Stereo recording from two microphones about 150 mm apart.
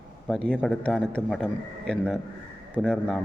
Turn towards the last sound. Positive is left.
turn(degrees=0)  # may be behind; listen again after turning